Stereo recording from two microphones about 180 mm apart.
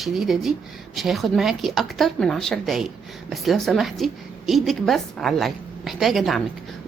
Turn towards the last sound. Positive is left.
turn(degrees=0)  # may be behind; listen again after turning